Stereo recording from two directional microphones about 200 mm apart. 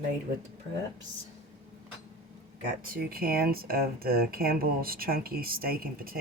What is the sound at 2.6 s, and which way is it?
Speech, 45° right (ahead or behind).